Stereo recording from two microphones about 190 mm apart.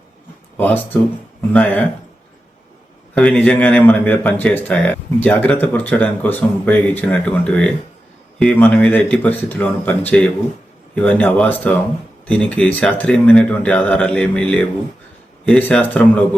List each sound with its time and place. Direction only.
0.5 s speech: 10° left (ahead or behind)
3.2 s speech: 5° left (ahead or behind)